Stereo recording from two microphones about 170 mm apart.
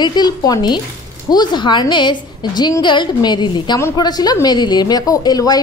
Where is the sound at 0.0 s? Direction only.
25° left (ahead or behind).